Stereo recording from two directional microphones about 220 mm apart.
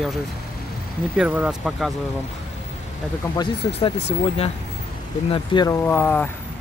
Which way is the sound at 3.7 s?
25° left (ahead or behind).